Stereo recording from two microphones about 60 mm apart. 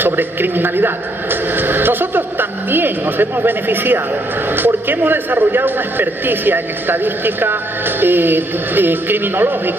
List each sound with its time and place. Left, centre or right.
0.2 s a man's voice: right